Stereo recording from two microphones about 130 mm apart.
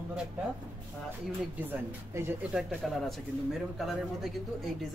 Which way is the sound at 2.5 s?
5° right (ahead or behind).